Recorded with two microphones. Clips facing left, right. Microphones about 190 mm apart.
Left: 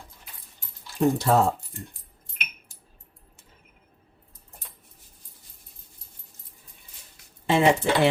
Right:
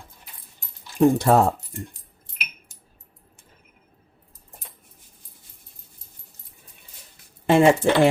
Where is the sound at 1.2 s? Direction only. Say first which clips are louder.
Right 3 dB; 55° right (ahead or behind).